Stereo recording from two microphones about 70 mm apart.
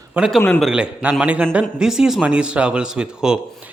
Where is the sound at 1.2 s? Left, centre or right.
Right.